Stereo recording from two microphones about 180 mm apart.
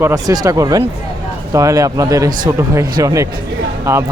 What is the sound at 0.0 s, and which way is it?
Speech, 20° right (ahead or behind).